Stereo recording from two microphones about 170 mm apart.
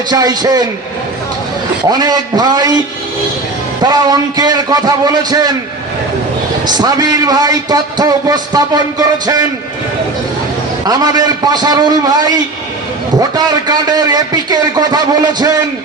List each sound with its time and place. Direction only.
0.1 s a man's voice: 20° right (ahead or behind)
1.9 s a man's voice: 25° right (ahead or behind)
3.8 s a man's voice: 20° right (ahead or behind)
6.7 s a man's voice: 25° right (ahead or behind)
10.8 s a man's voice: 20° right (ahead or behind)